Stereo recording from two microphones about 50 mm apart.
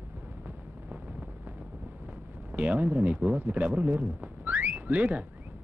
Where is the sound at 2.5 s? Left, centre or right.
Right.